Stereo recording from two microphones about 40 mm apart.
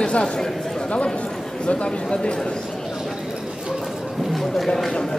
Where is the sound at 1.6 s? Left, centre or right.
Left.